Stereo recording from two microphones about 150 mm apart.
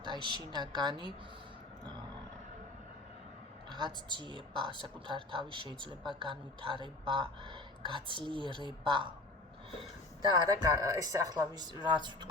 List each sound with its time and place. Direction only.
0.0 s speech: 30° right (ahead or behind)
3.7 s speech: 30° right (ahead or behind)
10.2 s speech: 25° right (ahead or behind)